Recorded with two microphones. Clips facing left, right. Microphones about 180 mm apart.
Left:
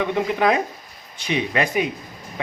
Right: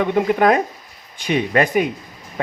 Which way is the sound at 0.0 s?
50° right (ahead or behind).